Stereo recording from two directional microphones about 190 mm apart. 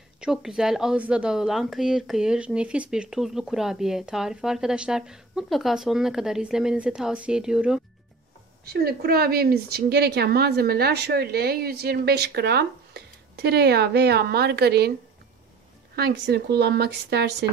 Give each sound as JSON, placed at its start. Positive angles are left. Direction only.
{"t": 0.2, "sound": "speech", "side_deg": -5}
{"t": 8.6, "sound": "a woman's voice", "side_deg": -55}
{"t": 16.0, "sound": "a woman's voice", "side_deg": -60}